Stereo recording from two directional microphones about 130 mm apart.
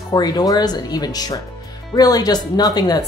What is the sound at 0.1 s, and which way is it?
Speech, 30° left (ahead or behind).